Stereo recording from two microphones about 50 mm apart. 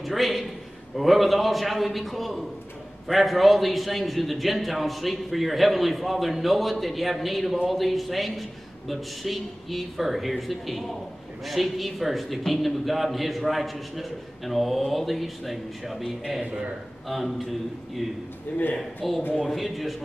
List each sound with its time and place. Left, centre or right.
0.0 s a man's voice: centre